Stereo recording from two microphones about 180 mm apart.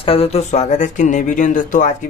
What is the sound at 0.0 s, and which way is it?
Speech, 30° left (ahead or behind).